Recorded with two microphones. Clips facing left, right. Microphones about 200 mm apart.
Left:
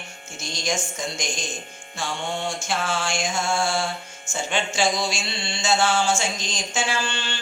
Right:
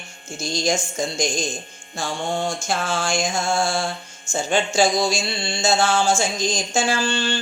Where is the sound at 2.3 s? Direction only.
40° right (ahead or behind).